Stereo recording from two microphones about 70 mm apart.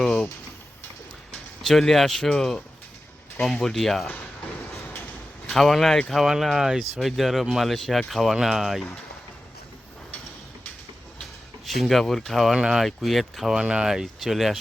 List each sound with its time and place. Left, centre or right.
1.6 s speech: centre
5.5 s speech: centre
11.2 s speech: centre
12.5 s speech: centre
12.8 s speech: centre
13.6 s speech: centre